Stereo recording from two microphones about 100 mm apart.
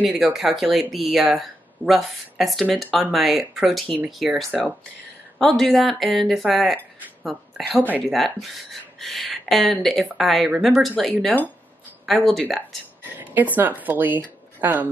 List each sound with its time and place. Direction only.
0.0 s speech: 5° right (ahead or behind)
8.0 s speech: centre (ahead or behind)
13.0 s a sound: 20° right (ahead or behind)
13.6 s a woman's voice: 20° right (ahead or behind)